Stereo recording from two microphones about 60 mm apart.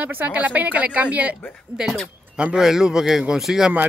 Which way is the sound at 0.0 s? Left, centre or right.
Right.